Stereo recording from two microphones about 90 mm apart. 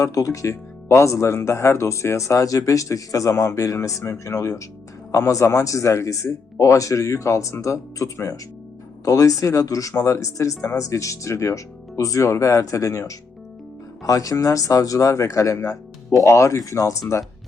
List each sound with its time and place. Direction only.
0.0 s speech: 40° left (ahead or behind)